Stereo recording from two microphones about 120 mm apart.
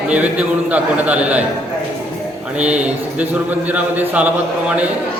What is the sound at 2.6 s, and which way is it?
Speech, 10° right (ahead or behind).